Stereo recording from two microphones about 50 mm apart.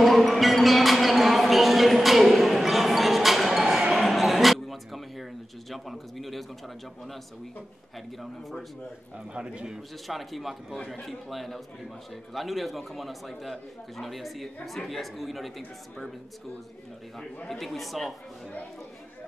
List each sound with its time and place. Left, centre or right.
0.0 s a sound: centre
3.9 s music: centre
5.7 s bird: centre
8.2 s a man's voice: centre
9.3 s a man's voice: centre
10.0 s a man's voice: centre
17.5 s a man's voice: centre